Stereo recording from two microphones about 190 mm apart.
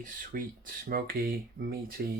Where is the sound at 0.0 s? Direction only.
45° right (ahead or behind).